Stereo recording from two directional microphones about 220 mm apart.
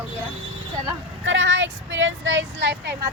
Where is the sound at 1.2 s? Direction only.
55° right (ahead or behind).